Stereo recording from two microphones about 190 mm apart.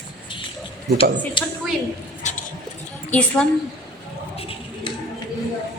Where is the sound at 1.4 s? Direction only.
25° left (ahead or behind).